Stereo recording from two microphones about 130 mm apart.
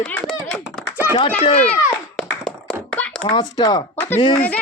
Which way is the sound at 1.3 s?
55° left (ahead or behind).